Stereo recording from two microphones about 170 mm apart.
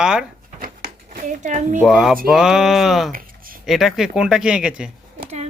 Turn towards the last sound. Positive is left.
turn(degrees=-5)  # may be behind; listen again after turning